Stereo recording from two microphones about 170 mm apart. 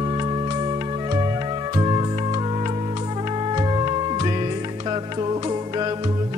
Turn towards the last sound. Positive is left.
turn(degrees=-25)  # may be behind; listen again after turning